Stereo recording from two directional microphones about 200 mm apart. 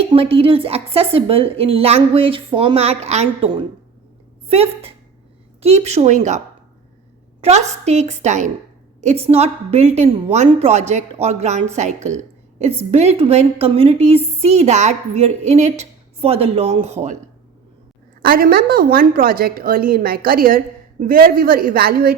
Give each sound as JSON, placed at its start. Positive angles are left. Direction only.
{"t": 0.0, "sound": "a woman's voice", "side_deg": -30}
{"t": 7.4, "sound": "a woman's voice", "side_deg": -35}
{"t": 18.2, "sound": "a woman's voice", "side_deg": -45}